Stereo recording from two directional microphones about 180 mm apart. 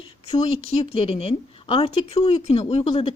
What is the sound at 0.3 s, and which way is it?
A woman's voice, 35° left (ahead or behind).